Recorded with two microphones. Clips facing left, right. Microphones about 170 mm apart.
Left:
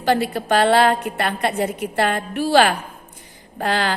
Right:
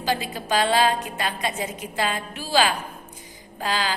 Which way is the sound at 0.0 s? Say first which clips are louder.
Left 7 dB; 60° left (ahead or behind).